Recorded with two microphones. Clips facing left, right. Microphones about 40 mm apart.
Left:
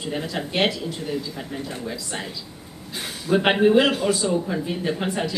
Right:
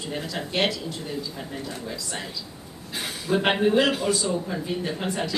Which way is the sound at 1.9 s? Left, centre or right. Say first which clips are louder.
Left 2 dB; centre.